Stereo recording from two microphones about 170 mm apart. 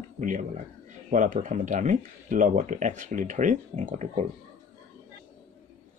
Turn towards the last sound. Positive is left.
turn(degrees=-45)  # may be behind; listen again after turning